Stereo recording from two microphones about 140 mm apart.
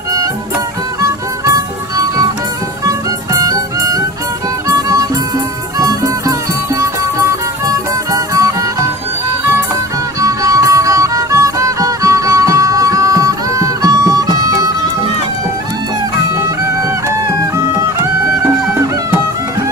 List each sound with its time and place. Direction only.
1.0 s music: 25° right (ahead or behind)
3.3 s music: 25° right (ahead or behind)
10.2 s music: 25° right (ahead or behind)
17.4 s music: 25° right (ahead or behind)